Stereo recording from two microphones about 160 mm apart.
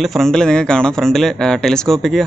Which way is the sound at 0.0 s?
Centre (ahead or behind).